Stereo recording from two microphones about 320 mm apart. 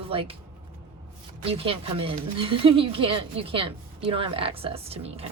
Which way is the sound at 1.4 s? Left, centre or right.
Centre.